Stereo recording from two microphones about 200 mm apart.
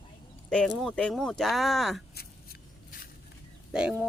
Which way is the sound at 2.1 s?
50° left (ahead or behind).